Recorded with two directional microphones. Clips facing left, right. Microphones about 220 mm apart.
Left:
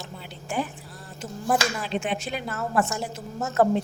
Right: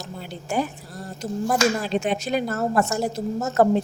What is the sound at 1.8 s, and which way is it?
A woman's voice, 40° right (ahead or behind).